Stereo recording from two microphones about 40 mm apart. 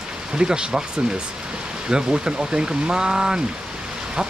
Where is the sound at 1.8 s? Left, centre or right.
Centre.